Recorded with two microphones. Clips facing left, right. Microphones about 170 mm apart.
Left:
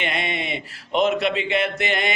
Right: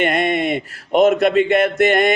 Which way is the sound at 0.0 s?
50° right (ahead or behind).